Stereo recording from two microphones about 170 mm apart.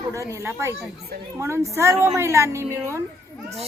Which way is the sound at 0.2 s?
20° right (ahead or behind).